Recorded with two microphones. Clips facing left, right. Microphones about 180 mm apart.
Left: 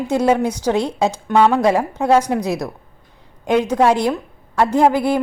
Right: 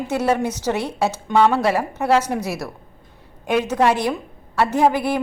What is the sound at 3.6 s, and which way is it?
A woman's voice, 10° left (ahead or behind).